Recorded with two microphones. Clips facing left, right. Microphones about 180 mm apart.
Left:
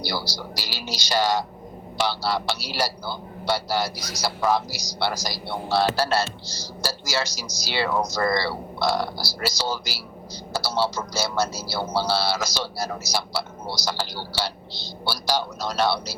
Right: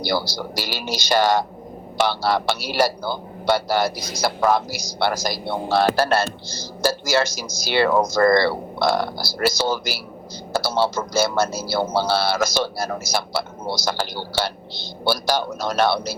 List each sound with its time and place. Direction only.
0.0 s speech: 55° right (ahead or behind)